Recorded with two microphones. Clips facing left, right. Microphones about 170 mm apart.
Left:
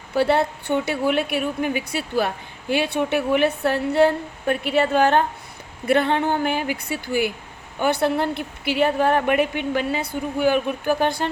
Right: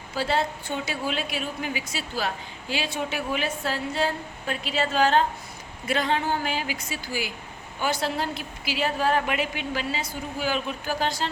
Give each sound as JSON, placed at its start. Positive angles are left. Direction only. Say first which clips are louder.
{"t": 0.1, "sound": "a woman's voice", "louder": "left 7 dB", "side_deg": 60}